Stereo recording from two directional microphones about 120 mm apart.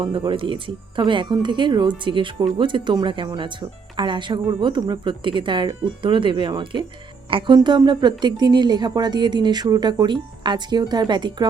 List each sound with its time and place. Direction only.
0.0 s speech: 45° right (ahead or behind)